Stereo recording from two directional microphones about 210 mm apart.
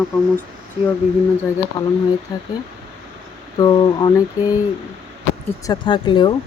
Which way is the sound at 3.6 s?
20° left (ahead or behind).